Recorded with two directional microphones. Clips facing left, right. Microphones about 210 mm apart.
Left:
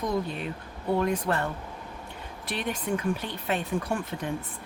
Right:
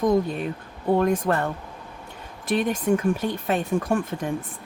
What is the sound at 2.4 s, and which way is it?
Speech, 45° right (ahead or behind).